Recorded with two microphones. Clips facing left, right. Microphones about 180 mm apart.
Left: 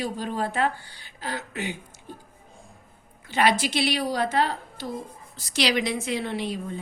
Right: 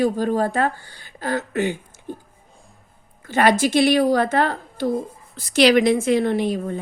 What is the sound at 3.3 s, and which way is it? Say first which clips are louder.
A woman's voice: right 6 dB; 50° right (ahead or behind).